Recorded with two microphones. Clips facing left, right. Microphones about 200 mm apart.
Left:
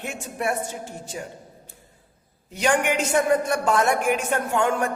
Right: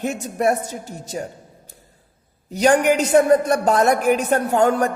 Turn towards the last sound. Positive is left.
turn(degrees=-40)  # may be behind; listen again after turning